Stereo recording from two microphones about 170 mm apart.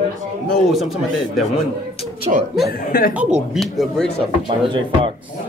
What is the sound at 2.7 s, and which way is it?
Speech, 60° left (ahead or behind).